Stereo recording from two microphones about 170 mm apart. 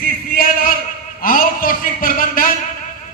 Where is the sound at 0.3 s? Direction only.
60° left (ahead or behind).